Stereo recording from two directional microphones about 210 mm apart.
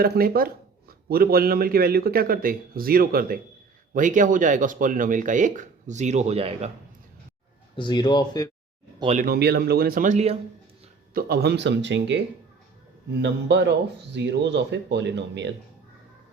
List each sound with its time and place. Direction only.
0.0 s speech: 45° right (ahead or behind); by 6.7 s 30° right (ahead or behind)
7.8 s speech: 20° left (ahead or behind)
9.1 s speech: 45° right (ahead or behind)
11.1 s a man's voice: 45° right (ahead or behind)
13.2 s a man's voice: 55° right (ahead or behind)